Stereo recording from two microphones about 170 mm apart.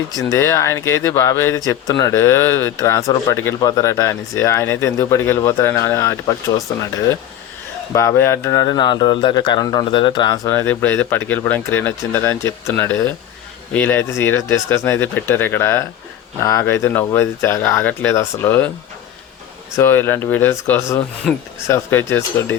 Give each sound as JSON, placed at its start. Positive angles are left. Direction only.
{"t": 0.2, "sound": "speech", "side_deg": 15}
{"t": 19.7, "sound": "speech", "side_deg": 15}
{"t": 21.3, "sound": "speech", "side_deg": 0}
{"t": 21.7, "sound": "speech", "side_deg": 10}